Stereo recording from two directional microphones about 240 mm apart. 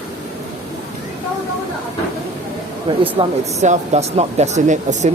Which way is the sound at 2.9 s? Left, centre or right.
Centre.